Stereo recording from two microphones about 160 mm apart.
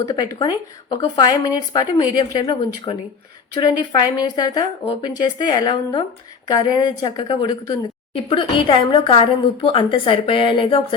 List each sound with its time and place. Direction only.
0.1 s speech: 25° left (ahead or behind)
3.8 s a woman's voice: 25° left (ahead or behind)